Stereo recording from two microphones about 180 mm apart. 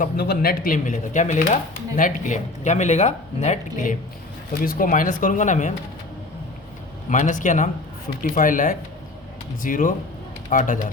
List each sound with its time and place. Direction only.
0.0 s speech: 60° left (ahead or behind); by 3.9 s 40° left (ahead or behind)
4.6 s speech: 50° left (ahead or behind)
7.1 s speech: 45° left (ahead or behind)